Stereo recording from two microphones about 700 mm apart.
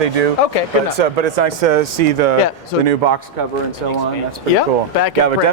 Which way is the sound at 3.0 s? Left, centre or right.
Right.